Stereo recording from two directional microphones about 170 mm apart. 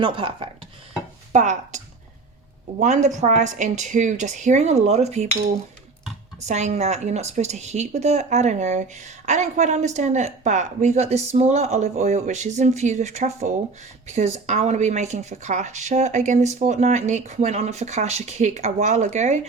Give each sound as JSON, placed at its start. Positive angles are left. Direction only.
{"t": 0.0, "sound": "speech", "side_deg": -30}
{"t": 1.3, "sound": "a woman's voice", "side_deg": -45}
{"t": 6.4, "sound": "a woman's voice", "side_deg": -40}